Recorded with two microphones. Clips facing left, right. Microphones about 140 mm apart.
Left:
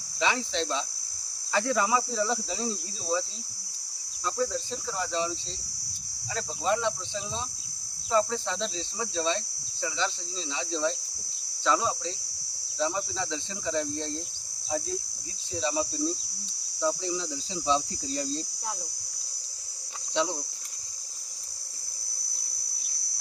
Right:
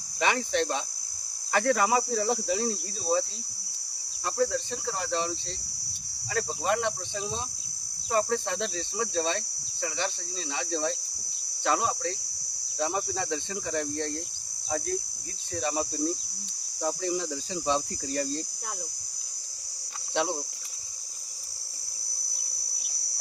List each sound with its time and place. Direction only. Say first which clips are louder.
0.2 s speech: right 2 dB; 55° right (ahead or behind)
8.1 s speech: even; 60° right (ahead or behind)
10.5 s speech: left 1 dB; 55° right (ahead or behind)
15.5 s speech: left 1 dB; 55° right (ahead or behind)